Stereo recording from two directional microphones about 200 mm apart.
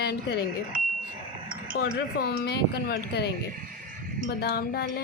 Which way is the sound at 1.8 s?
50° left (ahead or behind).